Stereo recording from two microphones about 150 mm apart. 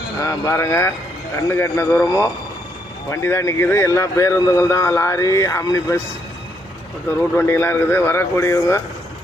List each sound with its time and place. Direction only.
0.2 s speech: 20° left (ahead or behind)
3.1 s speech: 15° left (ahead or behind)
7.3 s speech: 15° left (ahead or behind)